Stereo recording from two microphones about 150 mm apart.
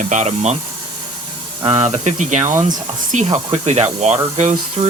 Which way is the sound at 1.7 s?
50° right (ahead or behind).